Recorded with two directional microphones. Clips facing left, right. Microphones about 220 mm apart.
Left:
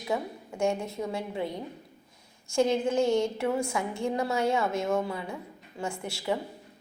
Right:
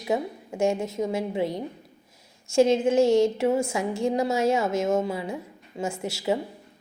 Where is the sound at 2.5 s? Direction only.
25° right (ahead or behind).